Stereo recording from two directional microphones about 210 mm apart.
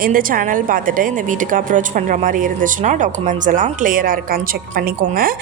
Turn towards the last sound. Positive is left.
turn(degrees=-45)  # may be behind; listen again after turning